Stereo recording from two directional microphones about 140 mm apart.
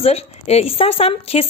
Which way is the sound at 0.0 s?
45° left (ahead or behind).